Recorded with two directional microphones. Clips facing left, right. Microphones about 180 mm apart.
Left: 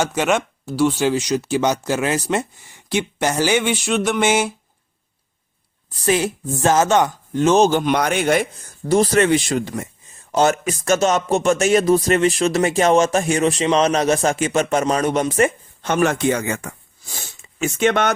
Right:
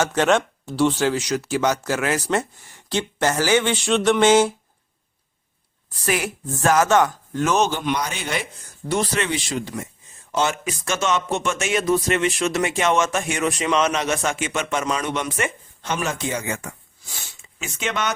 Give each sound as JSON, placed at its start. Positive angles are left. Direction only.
{"t": 0.0, "sound": "speech", "side_deg": 10}
{"t": 1.0, "sound": "speech", "side_deg": 15}
{"t": 6.0, "sound": "speech", "side_deg": 25}
{"t": 7.7, "sound": "speech", "side_deg": 45}
{"t": 15.9, "sound": "speech", "side_deg": 55}
{"t": 17.2, "sound": "a sound", "side_deg": 45}